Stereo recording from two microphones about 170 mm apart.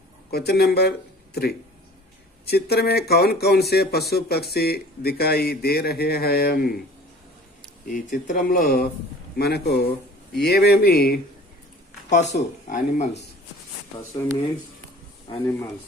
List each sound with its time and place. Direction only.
0.3 s speech: 70° left (ahead or behind)
7.9 s speech: 50° left (ahead or behind)
9.4 s speech: 75° left (ahead or behind)
12.1 s speech: 45° left (ahead or behind)
14.2 s speech: 15° left (ahead or behind)